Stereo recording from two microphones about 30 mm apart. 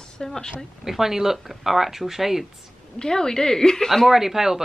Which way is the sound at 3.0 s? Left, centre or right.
Left.